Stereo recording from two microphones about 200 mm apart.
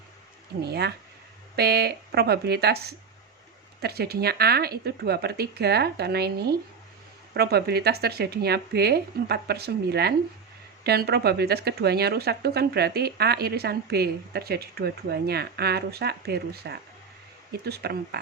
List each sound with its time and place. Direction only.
0.6 s speech: 55° right (ahead or behind)